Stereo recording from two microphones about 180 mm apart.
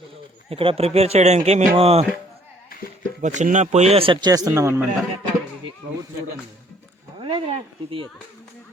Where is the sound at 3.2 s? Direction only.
45° right (ahead or behind); by 4.9 s 15° right (ahead or behind).